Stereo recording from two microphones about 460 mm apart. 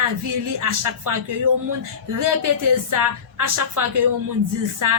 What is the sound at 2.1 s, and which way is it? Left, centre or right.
A woman's voice, right.